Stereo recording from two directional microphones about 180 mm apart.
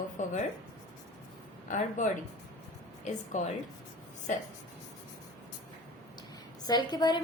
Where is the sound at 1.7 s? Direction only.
45° left (ahead or behind).